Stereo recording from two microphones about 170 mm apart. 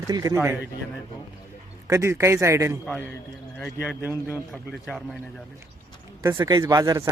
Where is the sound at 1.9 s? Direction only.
15° right (ahead or behind).